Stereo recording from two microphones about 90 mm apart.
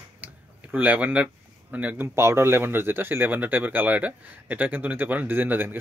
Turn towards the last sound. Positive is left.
turn(degrees=-20)  # may be behind; listen again after turning